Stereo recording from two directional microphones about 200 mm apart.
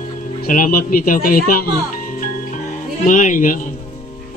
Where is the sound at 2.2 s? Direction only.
40° left (ahead or behind).